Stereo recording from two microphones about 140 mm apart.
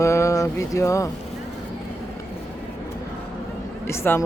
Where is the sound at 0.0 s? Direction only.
20° left (ahead or behind).